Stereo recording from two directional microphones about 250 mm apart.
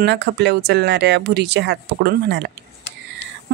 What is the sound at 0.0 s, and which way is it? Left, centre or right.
Speech, right.